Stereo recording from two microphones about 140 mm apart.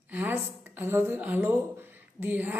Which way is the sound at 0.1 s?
15° right (ahead or behind).